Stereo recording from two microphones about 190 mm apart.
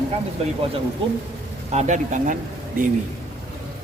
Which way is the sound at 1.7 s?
35° right (ahead or behind).